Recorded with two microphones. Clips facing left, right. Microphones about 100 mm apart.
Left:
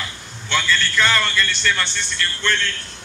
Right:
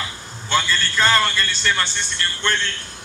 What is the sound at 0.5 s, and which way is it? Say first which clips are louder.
A man's voice: even; 35° right (ahead or behind).